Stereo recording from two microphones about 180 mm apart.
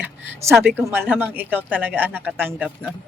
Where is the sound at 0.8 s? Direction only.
10° right (ahead or behind).